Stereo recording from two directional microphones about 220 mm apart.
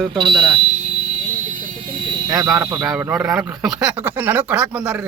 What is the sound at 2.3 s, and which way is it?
Speech, 15° right (ahead or behind).